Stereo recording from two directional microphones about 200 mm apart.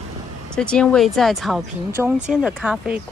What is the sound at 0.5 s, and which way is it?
A woman's voice, 5° left (ahead or behind).